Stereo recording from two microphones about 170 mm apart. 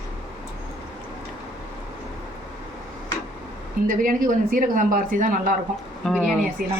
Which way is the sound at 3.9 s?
55° right (ahead or behind).